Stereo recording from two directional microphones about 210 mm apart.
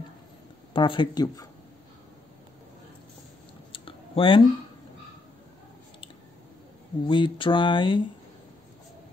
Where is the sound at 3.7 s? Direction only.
25° left (ahead or behind).